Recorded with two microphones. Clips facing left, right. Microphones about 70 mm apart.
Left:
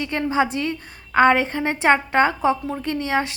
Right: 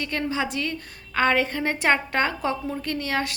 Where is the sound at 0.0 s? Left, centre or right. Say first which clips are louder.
Left 5 dB; left.